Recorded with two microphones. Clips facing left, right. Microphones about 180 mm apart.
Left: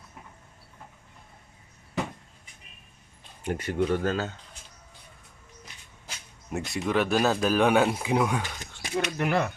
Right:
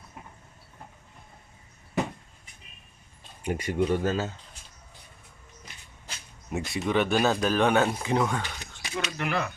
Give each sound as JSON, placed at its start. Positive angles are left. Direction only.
{"t": 3.4, "sound": "speech", "side_deg": -10}
{"t": 6.1, "sound": "speech", "side_deg": 0}
{"t": 8.8, "sound": "speech", "side_deg": 50}